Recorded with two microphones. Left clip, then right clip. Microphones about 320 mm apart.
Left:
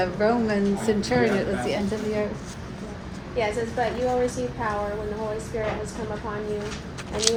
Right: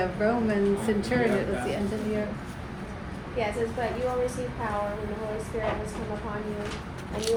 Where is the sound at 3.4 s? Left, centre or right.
Left.